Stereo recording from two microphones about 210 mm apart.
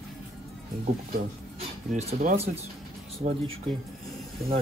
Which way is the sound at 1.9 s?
35° right (ahead or behind).